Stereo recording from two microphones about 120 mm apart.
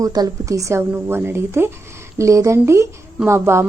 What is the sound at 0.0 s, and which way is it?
A woman's voice, 30° right (ahead or behind).